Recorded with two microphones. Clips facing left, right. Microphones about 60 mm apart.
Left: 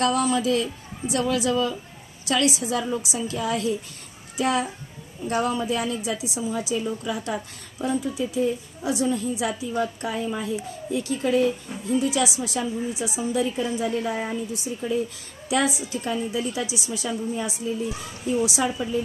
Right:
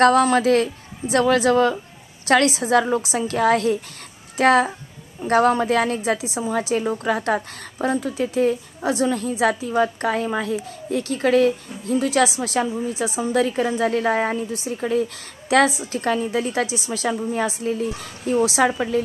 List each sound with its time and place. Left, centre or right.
0.0 s a woman's voice: right
4.4 s a woman's voice: right
5.9 s a woman's voice: right
6.6 s a woman's voice: right
12.4 s a woman's voice: right
14.7 s a woman's voice: right
16.7 s a woman's voice: right
17.0 s a woman's voice: right
18.6 s a woman's voice: right